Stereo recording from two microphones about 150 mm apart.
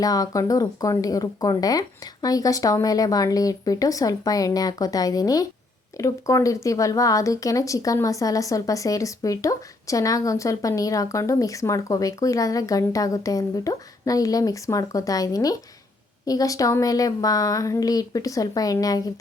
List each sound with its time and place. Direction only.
0.0 s speech: 25° left (ahead or behind)